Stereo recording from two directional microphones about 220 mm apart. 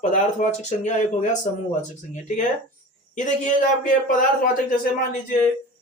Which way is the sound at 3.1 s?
35° left (ahead or behind).